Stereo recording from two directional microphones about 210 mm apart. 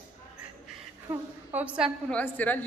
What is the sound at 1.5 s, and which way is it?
Speech, 5° right (ahead or behind).